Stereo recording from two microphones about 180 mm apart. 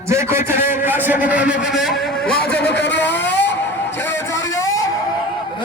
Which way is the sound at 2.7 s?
75° left (ahead or behind).